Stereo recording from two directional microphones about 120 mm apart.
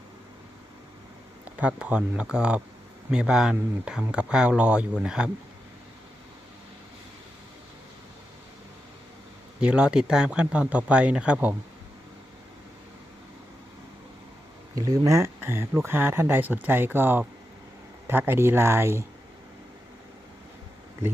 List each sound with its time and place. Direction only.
1.5 s speech: 10° right (ahead or behind)
9.6 s speech: 5° right (ahead or behind)
14.8 s speech: 30° right (ahead or behind)